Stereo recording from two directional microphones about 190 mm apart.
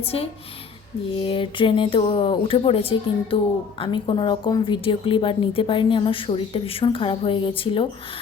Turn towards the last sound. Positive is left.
turn(degrees=30)  # may be behind; listen again after turning